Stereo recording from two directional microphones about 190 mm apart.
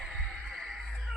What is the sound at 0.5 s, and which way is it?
Music, centre (ahead or behind).